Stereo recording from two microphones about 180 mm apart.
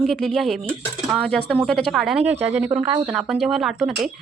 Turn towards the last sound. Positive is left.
turn(degrees=0)  # may be behind; listen again after turning